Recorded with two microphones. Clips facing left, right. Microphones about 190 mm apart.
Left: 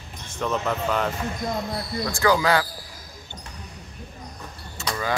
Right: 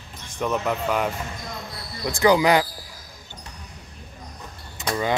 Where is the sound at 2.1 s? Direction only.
15° right (ahead or behind).